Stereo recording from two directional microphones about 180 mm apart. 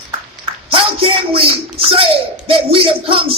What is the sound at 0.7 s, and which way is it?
Speech, 30° right (ahead or behind).